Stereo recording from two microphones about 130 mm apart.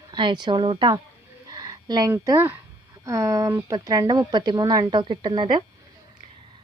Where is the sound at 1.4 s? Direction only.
30° right (ahead or behind).